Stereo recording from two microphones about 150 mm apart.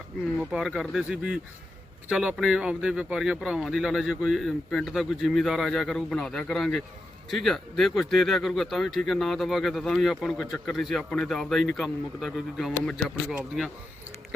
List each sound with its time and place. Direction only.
0.3 s speech: 5° right (ahead or behind)
13.2 s speech: 10° right (ahead or behind)